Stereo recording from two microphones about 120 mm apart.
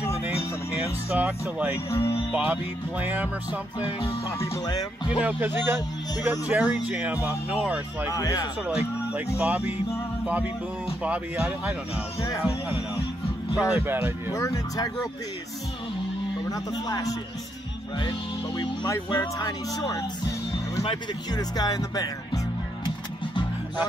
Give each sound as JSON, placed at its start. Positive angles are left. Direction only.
{"t": 1.1, "sound": "speech", "side_deg": -15}
{"t": 1.9, "sound": "speech", "side_deg": 20}
{"t": 2.3, "sound": "speech", "side_deg": -15}
{"t": 4.6, "sound": "speech", "side_deg": 40}
{"t": 5.2, "sound": "speech", "side_deg": -15}
{"t": 8.1, "sound": "speech", "side_deg": 30}
{"t": 8.6, "sound": "speech", "side_deg": -15}
{"t": 11.0, "sound": "speech", "side_deg": -15}
{"t": 12.2, "sound": "speech", "side_deg": 30}
{"t": 13.7, "sound": "speech", "side_deg": -15}
{"t": 14.3, "sound": "speech", "side_deg": 30}
{"t": 16.4, "sound": "speech", "side_deg": 30}
{"t": 19.0, "sound": "speech", "side_deg": 35}
{"t": 22.8, "sound": "music", "side_deg": 40}